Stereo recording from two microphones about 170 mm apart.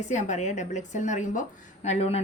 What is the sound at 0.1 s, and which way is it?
A woman's voice, 45° left (ahead or behind).